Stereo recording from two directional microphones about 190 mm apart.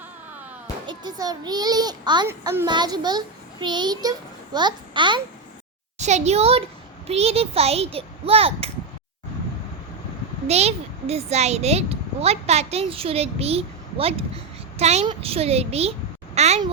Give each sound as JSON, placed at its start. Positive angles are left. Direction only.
{"t": 0.9, "sound": "a child's voice", "side_deg": -20}
{"t": 6.0, "sound": "a child's voice", "side_deg": -35}
{"t": 10.4, "sound": "a child's voice", "side_deg": -35}